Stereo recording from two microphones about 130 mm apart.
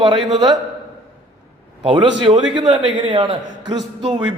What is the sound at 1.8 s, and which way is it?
A man's voice, 40° right (ahead or behind).